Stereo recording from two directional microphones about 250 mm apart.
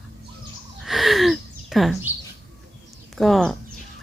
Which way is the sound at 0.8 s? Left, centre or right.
Centre.